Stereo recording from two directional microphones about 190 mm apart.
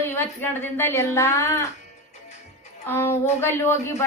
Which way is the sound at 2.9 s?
15° left (ahead or behind).